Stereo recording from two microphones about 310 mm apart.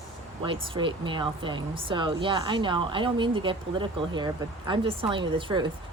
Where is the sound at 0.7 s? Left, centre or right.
Centre.